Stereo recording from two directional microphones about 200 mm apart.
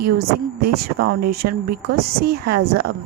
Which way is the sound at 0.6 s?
50° right (ahead or behind).